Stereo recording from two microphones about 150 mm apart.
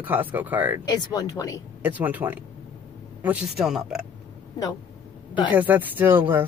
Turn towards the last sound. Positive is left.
turn(degrees=-15)  # may be behind; listen again after turning